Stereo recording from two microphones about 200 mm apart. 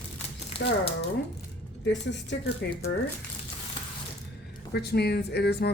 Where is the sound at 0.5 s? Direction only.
30° left (ahead or behind).